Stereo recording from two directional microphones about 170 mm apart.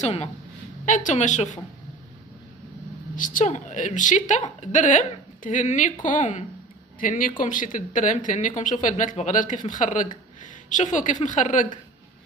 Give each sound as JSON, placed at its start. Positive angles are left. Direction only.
{"t": 0.0, "sound": "a woman's voice", "side_deg": 40}
{"t": 3.2, "sound": "speech", "side_deg": 50}